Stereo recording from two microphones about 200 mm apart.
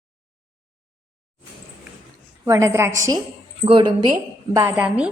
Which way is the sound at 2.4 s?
15° right (ahead or behind).